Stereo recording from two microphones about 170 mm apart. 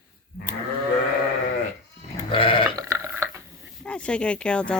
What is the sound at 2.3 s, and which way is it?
Sheep, 30° left (ahead or behind).